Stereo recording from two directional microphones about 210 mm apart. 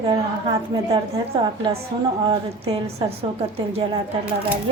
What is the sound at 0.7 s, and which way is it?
Speech, 20° right (ahead or behind).